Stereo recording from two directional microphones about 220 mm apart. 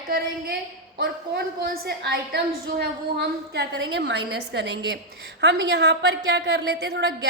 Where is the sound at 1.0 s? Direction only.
45° right (ahead or behind).